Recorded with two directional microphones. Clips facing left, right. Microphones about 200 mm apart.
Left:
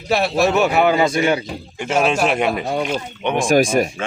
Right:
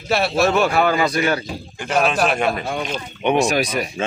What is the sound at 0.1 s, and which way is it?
A man's voice, 15° left (ahead or behind).